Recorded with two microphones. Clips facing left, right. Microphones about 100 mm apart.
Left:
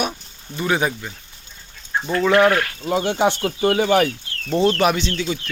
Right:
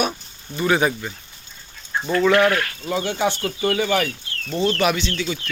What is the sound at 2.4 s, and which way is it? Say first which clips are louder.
Speech: left 2 dB; 25° left (ahead or behind).